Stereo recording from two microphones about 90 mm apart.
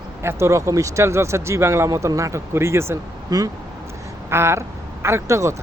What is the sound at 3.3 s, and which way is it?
Speech, 45° right (ahead or behind).